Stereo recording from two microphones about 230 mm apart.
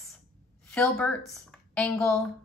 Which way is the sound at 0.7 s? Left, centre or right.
Centre.